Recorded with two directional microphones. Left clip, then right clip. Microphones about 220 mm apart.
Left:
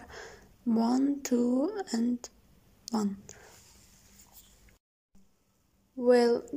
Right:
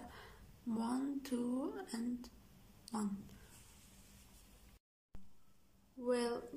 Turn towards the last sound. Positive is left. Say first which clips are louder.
# left 14 dB
turn(degrees=30)  # may be behind; listen again after turning